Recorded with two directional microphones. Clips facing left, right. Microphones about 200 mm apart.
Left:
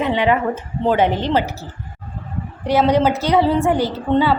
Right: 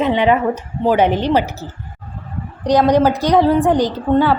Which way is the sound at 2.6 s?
15° right (ahead or behind).